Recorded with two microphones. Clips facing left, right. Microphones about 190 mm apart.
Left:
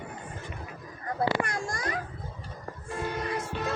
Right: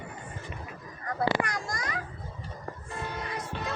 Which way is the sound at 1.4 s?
30° left (ahead or behind).